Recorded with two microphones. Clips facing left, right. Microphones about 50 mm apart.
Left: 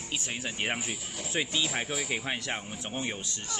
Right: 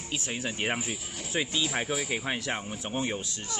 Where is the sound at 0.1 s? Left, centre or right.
Centre.